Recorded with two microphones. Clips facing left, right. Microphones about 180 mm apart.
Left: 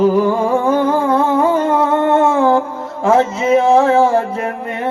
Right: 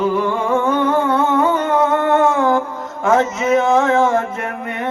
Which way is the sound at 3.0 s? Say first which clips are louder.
Left 2 dB; 30° left (ahead or behind).